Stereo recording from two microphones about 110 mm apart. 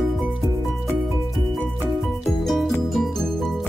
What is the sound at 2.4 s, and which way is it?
Music, centre (ahead or behind).